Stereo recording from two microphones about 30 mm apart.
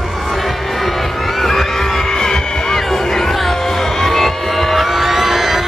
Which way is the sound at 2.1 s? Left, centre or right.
Centre.